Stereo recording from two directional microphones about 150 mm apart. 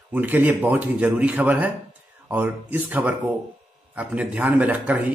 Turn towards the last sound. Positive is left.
turn(degrees=-10)  # may be behind; listen again after turning